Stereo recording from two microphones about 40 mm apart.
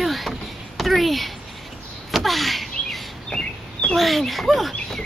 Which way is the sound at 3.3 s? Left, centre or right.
Left.